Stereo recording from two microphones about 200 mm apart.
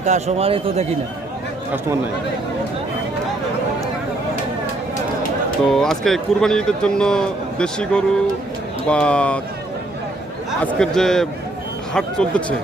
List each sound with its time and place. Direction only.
0.0 s a man's voice: 35° right (ahead or behind)
5.6 s speech: centre (ahead or behind)
10.6 s speech: 5° left (ahead or behind)